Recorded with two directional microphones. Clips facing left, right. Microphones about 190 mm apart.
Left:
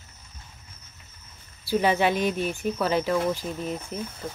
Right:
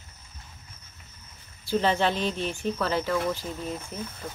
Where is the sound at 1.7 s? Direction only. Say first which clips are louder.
Left 2 dB; 10° left (ahead or behind).